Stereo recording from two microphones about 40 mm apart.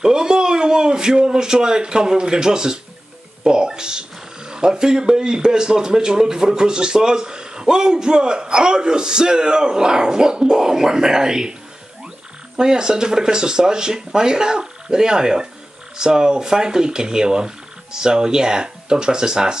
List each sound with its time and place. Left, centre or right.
0.0 s speech: centre
12.5 s speech: centre